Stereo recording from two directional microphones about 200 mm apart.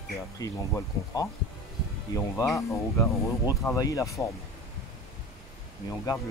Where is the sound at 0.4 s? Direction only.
15° left (ahead or behind).